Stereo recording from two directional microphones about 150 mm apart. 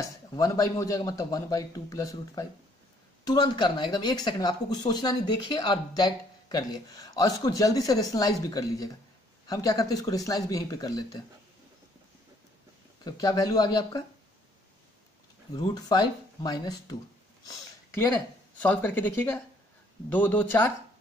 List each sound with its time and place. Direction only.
0.0 s speech: 25° left (ahead or behind)
13.0 s speech: 25° left (ahead or behind)
15.5 s speech: 30° left (ahead or behind)
17.5 s speech: 15° left (ahead or behind)